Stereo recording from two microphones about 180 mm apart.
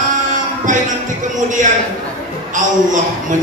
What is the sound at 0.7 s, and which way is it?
Music, 45° right (ahead or behind).